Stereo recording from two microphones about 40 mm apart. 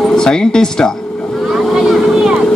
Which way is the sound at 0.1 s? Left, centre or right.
Centre.